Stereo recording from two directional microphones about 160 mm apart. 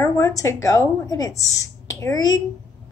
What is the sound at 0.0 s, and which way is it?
A woman's voice, 20° left (ahead or behind).